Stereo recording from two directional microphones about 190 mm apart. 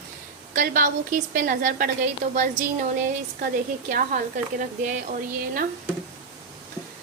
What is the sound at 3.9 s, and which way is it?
Speech, 45° right (ahead or behind).